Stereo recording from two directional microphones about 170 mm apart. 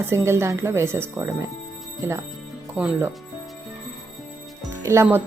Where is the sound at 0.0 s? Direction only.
15° right (ahead or behind).